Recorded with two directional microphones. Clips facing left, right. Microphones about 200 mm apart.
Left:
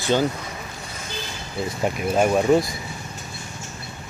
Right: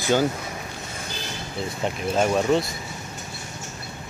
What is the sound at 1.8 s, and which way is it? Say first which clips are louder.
Speech: left 3 dB; 10° left (ahead or behind).